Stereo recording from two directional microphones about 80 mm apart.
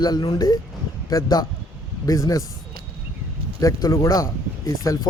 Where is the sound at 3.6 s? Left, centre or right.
Left.